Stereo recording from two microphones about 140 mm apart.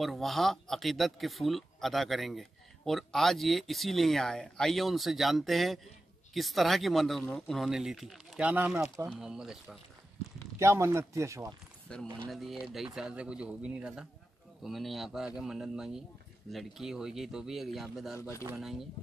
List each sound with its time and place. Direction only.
0.0 s speech: centre (ahead or behind)
10.6 s speech: 20° right (ahead or behind)
11.9 s speech: 5° left (ahead or behind)